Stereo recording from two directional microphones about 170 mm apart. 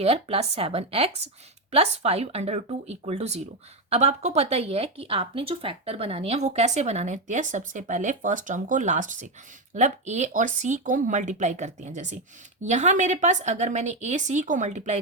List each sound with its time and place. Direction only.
0.0 s speech: 40° right (ahead or behind)